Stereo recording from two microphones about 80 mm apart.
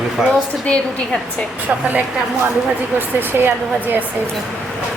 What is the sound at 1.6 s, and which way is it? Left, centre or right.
A woman's voice, centre.